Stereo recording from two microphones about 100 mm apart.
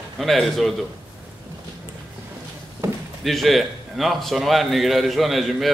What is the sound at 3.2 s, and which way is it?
Speech, centre (ahead or behind).